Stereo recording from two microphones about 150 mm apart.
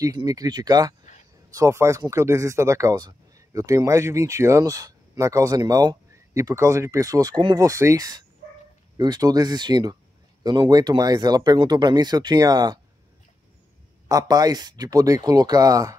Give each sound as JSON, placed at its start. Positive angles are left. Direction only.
{"t": 0.0, "sound": "speech", "side_deg": -25}
{"t": 14.0, "sound": "speech", "side_deg": -25}